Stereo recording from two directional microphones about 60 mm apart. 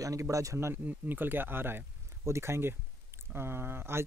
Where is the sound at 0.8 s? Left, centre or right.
Right.